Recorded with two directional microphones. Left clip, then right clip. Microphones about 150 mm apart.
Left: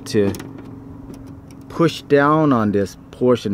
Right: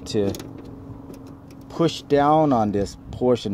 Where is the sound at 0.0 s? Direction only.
20° left (ahead or behind).